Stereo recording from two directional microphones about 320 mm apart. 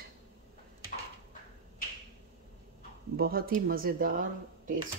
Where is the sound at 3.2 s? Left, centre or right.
Right.